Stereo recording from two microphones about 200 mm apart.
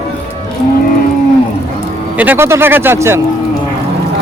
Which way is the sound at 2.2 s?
10° right (ahead or behind).